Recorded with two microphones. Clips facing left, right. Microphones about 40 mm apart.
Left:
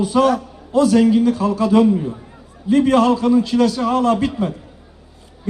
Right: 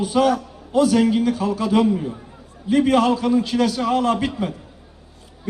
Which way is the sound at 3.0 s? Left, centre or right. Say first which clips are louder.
Left 3 dB; right.